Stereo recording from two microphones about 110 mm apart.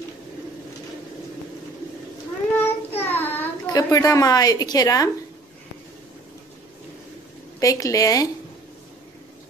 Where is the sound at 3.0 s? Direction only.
20° left (ahead or behind).